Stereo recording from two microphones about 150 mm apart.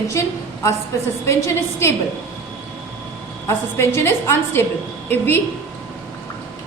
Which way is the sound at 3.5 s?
15° left (ahead or behind).